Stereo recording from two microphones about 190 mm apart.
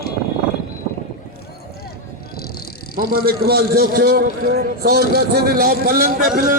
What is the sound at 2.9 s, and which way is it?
A man's voice, 50° right (ahead or behind).